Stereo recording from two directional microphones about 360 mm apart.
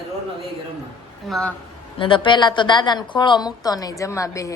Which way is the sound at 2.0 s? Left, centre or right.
Centre.